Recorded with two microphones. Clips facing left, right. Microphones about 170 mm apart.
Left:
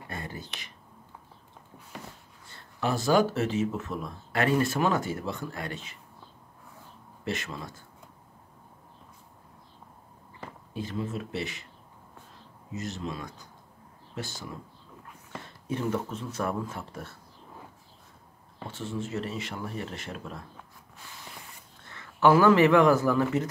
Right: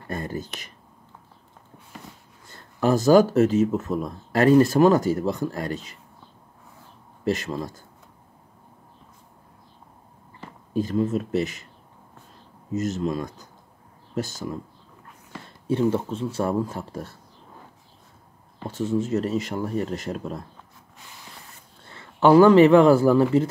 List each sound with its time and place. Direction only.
0.1 s speech: 45° right (ahead or behind)
2.4 s speech: 40° right (ahead or behind)
7.2 s speech: 35° right (ahead or behind)
10.7 s speech: 40° right (ahead or behind)
12.7 s speech: 45° right (ahead or behind)
15.6 s speech: 30° right (ahead or behind)
18.7 s speech: 40° right (ahead or behind)
21.8 s speech: 30° right (ahead or behind)